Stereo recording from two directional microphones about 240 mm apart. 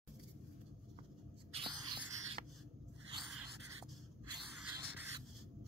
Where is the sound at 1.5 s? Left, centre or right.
Centre.